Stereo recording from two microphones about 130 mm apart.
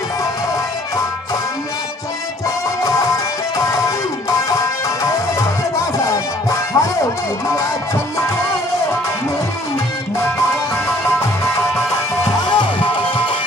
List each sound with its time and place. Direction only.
2.8 s music: 25° left (ahead or behind)
12.5 s music: 40° left (ahead or behind)